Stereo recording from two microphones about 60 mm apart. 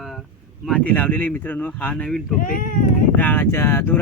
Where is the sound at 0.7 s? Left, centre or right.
Left.